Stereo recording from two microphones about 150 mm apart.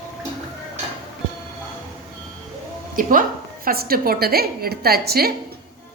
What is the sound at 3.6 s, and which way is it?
A woman's voice, 85° right.